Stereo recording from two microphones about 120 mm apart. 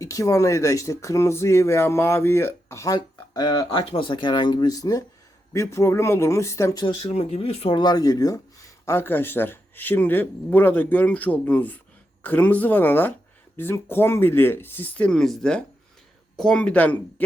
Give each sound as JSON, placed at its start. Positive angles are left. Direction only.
{"t": 0.0, "sound": "speech", "side_deg": 30}
{"t": 3.7, "sound": "speech", "side_deg": 50}
{"t": 6.8, "sound": "speech", "side_deg": 55}
{"t": 7.8, "sound": "speech", "side_deg": 35}
{"t": 8.9, "sound": "speech", "side_deg": 20}